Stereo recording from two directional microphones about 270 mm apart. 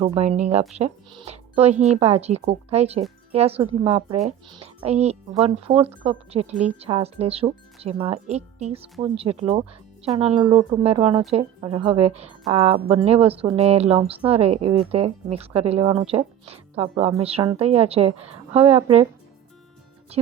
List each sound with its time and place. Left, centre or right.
0.0 s speech: centre